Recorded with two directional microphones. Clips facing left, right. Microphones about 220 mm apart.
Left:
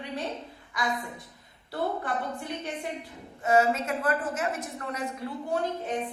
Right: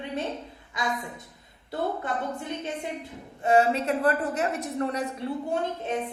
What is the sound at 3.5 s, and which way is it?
A woman's voice, 35° right (ahead or behind).